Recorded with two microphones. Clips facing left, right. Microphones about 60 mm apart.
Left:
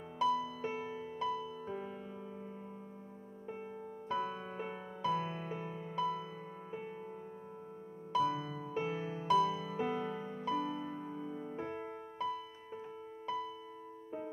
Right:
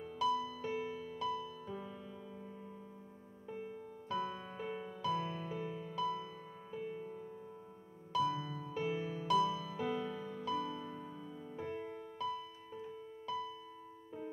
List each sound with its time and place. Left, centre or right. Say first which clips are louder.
0.2 s music: left 2 dB; left
3.4 s music: left 1 dB; left
8.1 s music: left 2 dB; left